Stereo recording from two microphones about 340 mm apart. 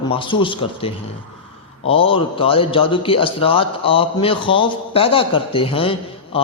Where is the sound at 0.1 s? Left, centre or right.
Centre.